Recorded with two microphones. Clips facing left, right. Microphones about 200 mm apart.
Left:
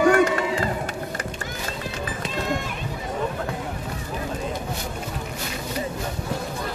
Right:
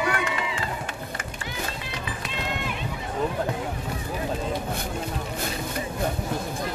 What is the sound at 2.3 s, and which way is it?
Run, 45° left (ahead or behind).